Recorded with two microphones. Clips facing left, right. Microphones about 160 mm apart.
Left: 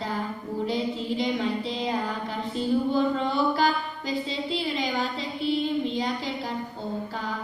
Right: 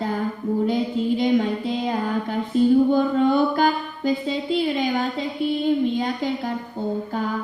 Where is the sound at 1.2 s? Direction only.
50° right (ahead or behind).